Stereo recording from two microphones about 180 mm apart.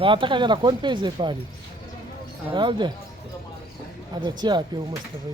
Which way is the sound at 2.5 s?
25° right (ahead or behind).